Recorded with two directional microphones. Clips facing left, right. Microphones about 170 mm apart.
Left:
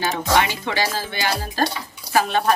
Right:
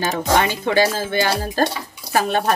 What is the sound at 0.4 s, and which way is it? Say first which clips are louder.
Speech: right 4 dB; 45° right (ahead or behind).